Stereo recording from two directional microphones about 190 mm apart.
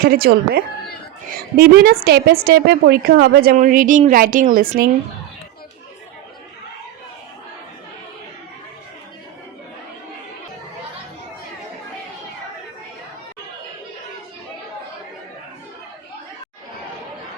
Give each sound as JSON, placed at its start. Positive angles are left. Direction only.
{"t": 0.0, "sound": "a woman's voice", "side_deg": -55}